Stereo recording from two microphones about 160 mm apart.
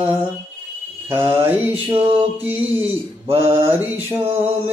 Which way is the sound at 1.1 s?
15° right (ahead or behind).